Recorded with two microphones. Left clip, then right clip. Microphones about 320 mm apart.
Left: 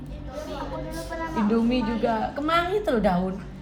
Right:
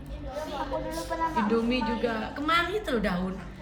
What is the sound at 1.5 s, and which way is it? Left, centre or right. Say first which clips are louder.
A woman's voice: left 2 dB; centre.